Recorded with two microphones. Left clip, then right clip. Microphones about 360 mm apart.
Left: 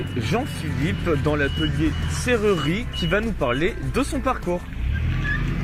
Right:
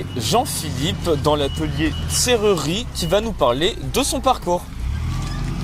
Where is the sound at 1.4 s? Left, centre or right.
Right.